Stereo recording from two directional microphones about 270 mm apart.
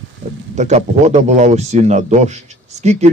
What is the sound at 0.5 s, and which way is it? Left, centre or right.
Speech, right.